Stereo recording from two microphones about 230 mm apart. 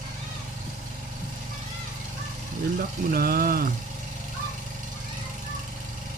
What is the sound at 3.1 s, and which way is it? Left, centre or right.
Speech, right.